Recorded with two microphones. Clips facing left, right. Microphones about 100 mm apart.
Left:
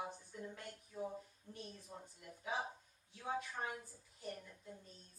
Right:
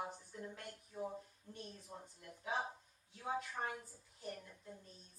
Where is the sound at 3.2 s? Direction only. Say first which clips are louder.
Right 1 dB; centre (ahead or behind).